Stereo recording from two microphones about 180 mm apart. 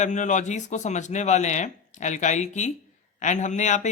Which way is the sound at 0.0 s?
45° left (ahead or behind).